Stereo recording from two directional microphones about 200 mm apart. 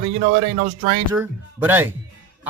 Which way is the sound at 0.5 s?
40° right (ahead or behind).